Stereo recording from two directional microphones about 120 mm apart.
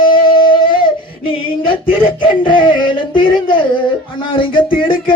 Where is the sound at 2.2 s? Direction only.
45° left (ahead or behind).